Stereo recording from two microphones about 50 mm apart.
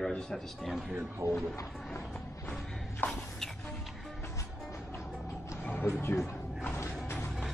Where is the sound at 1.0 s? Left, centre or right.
Right.